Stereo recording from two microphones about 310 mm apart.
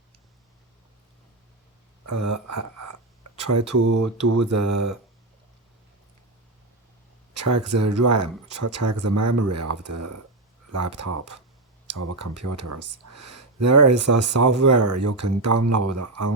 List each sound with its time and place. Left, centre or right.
2.0 s speech: right
7.4 s speech: right
8.6 s speech: right